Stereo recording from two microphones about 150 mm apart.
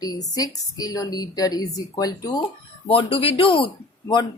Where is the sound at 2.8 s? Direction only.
40° left (ahead or behind).